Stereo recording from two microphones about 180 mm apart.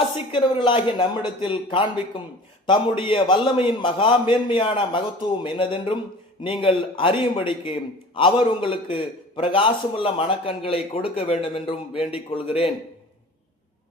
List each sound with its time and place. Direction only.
0.3 s a man's voice: 30° left (ahead or behind)